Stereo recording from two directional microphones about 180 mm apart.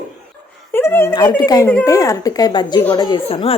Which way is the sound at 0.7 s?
15° left (ahead or behind).